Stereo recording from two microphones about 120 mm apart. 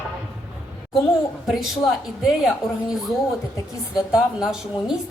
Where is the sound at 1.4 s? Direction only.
Centre (ahead or behind).